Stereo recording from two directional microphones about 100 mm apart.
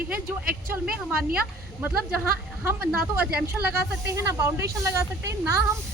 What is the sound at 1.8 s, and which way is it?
Speech, 25° right (ahead or behind).